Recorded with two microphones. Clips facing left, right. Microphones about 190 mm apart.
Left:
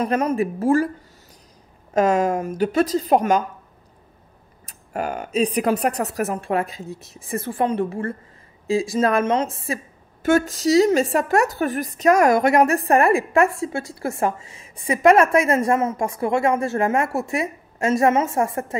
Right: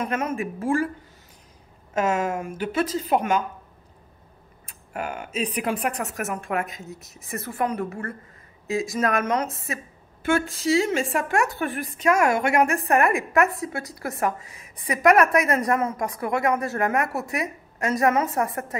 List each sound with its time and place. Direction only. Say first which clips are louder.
0.0 s speech: left 6 dB; 35° left (ahead or behind)
2.0 s speech: left 5 dB; 35° left (ahead or behind)
4.6 s a woman's voice: left 5 dB; 40° left (ahead or behind)
10.2 s a woman's voice: left 5 dB; 40° left (ahead or behind); by 18.8 s 25° left (ahead or behind)